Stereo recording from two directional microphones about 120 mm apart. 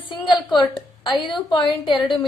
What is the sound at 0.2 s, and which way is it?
A woman's voice, 40° left (ahead or behind).